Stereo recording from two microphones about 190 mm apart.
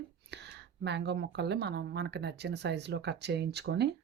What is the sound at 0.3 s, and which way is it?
Speech, 65° right (ahead or behind).